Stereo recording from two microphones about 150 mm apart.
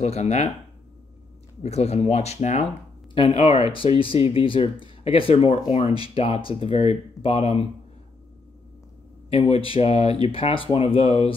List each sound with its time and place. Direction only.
0.0 s speech: 50° left (ahead or behind)
1.6 s speech: 45° left (ahead or behind)
9.3 s speech: 40° left (ahead or behind)